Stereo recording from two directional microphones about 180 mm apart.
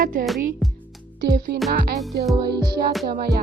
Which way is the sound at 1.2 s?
65° right (ahead or behind).